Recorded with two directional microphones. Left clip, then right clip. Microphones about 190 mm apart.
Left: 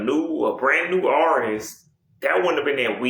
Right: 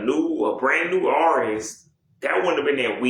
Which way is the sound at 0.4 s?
45° left (ahead or behind).